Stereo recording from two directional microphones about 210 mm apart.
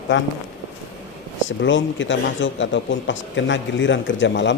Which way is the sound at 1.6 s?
65° left (ahead or behind).